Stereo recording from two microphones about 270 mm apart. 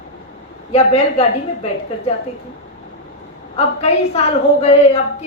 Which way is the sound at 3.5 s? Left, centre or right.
Left.